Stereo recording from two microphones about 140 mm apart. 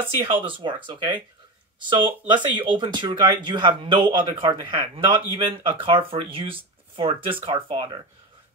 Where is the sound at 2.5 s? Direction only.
35° right (ahead or behind).